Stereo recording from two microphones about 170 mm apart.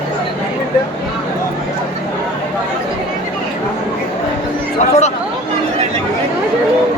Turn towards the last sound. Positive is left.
turn(degrees=40)  # may be behind; listen again after turning